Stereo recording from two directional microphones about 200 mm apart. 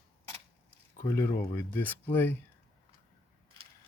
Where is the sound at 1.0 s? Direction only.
15° left (ahead or behind).